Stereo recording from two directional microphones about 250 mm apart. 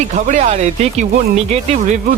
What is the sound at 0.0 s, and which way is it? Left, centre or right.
Speech, right.